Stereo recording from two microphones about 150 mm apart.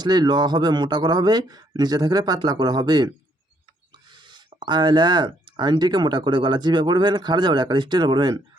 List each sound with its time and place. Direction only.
0.0 s speech: 30° right (ahead or behind)
4.1 s speech: 30° right (ahead or behind)